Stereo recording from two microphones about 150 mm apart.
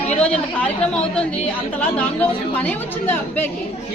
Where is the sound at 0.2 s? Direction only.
5° left (ahead or behind).